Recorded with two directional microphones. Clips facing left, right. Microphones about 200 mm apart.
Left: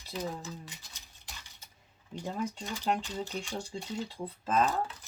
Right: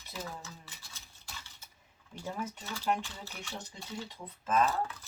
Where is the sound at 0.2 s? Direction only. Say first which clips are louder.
Left 6 dB; 15° left (ahead or behind).